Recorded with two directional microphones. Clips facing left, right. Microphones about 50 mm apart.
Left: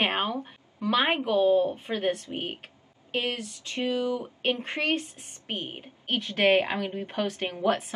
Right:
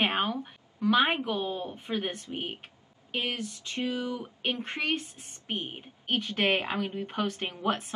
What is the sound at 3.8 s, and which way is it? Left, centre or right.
Speech, left.